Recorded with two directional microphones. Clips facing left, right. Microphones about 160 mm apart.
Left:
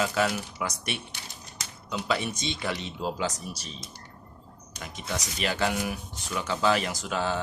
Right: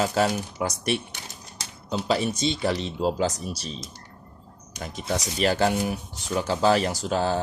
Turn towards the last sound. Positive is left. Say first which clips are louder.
# right 5 dB
turn(degrees=-35)  # may be behind; listen again after turning